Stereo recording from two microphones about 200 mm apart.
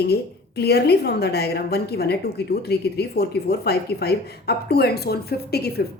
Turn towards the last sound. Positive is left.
turn(degrees=50)  # may be behind; listen again after turning